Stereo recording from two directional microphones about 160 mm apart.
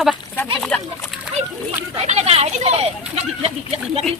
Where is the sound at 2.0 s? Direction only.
45° right (ahead or behind).